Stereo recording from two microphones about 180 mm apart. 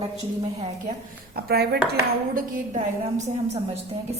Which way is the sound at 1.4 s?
60° right (ahead or behind).